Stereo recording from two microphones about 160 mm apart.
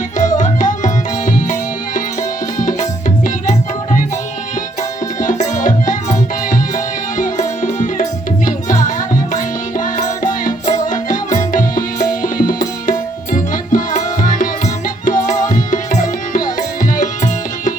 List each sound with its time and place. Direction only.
0.2 s tabla: 50° left (ahead or behind)
5.2 s tabla: 55° left (ahead or behind)
7.2 s music: 55° left (ahead or behind)
15.4 s tabla: 55° left (ahead or behind)